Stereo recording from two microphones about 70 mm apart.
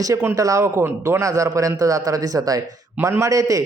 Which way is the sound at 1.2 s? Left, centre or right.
Right.